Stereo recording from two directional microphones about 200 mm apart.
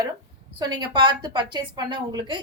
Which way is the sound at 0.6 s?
20° right (ahead or behind).